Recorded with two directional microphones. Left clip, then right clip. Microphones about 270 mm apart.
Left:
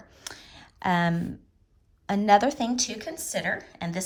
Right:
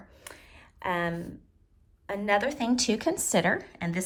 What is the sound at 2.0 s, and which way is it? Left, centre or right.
A woman's voice, centre.